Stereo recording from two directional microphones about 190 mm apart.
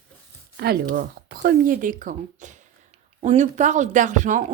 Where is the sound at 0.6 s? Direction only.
50° right (ahead or behind).